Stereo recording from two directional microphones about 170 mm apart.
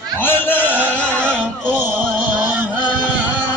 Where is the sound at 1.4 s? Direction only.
10° right (ahead or behind).